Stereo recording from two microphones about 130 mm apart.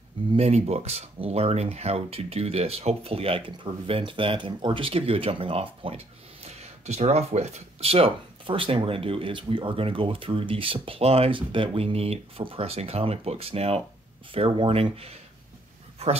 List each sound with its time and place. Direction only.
0.3 s a man's voice: 55° right (ahead or behind)